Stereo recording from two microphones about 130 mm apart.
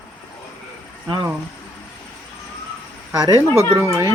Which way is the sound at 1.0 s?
35° right (ahead or behind).